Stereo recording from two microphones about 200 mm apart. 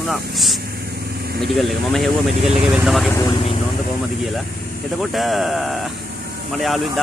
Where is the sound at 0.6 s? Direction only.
50° right (ahead or behind).